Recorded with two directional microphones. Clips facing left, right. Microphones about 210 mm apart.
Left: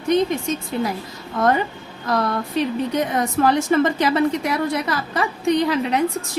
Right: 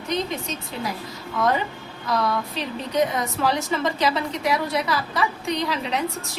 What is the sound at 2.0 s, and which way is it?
A woman's voice, 50° left (ahead or behind).